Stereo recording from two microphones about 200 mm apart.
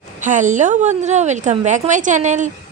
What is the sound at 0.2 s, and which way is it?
A woman's voice, 40° right (ahead or behind).